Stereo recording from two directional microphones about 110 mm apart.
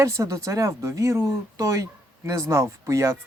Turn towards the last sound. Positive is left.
turn(degrees=-25)  # may be behind; listen again after turning